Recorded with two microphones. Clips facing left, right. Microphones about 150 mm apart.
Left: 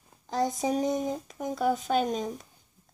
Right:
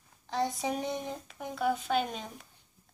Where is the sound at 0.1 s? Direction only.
40° left (ahead or behind).